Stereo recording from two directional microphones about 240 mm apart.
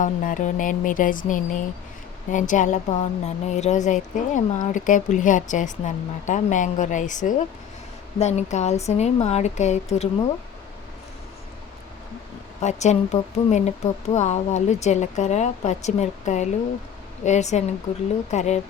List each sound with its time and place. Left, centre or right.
0.0 s a woman's voice: left
12.6 s speech: left